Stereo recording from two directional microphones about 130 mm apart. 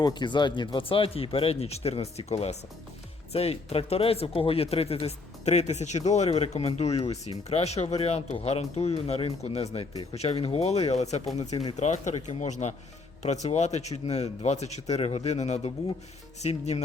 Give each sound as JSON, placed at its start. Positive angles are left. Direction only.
{"t": 0.0, "sound": "speech", "side_deg": 35}
{"t": 9.9, "sound": "speech", "side_deg": 35}
{"t": 10.2, "sound": "speech", "side_deg": 50}